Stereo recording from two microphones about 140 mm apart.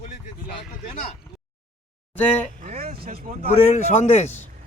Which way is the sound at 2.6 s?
60° right (ahead or behind).